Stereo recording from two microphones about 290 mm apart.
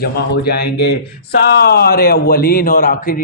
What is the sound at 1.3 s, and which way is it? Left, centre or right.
A man's voice, left.